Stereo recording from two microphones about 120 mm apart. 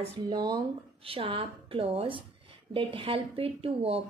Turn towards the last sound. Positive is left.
turn(degrees=-55)  # may be behind; listen again after turning